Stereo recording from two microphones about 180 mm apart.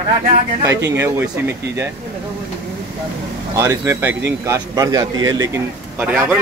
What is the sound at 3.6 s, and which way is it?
A man's voice, 15° right (ahead or behind).